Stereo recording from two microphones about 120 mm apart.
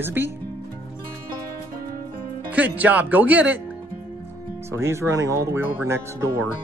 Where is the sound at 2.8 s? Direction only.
15° right (ahead or behind).